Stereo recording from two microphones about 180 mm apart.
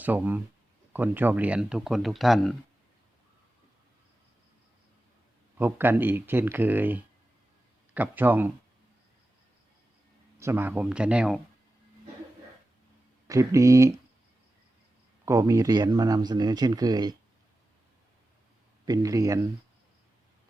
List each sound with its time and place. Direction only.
0.0 s speech: 10° right (ahead or behind)
5.5 s speech: 10° right (ahead or behind)
10.4 s speech: 10° right (ahead or behind)
13.2 s speech: 20° right (ahead or behind)
15.2 s speech: 15° right (ahead or behind)
18.9 s speech: 20° right (ahead or behind)